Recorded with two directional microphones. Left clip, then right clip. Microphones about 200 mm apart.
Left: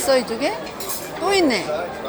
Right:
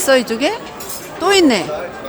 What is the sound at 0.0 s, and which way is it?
Speech, 75° right (ahead or behind).